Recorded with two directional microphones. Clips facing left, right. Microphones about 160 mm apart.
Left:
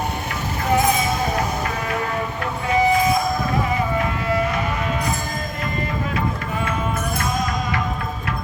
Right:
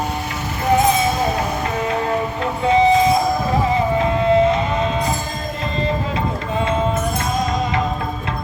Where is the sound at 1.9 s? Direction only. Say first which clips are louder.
Right 4 dB; 25° right (ahead or behind).